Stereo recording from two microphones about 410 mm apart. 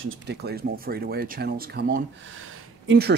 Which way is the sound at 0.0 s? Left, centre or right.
Right.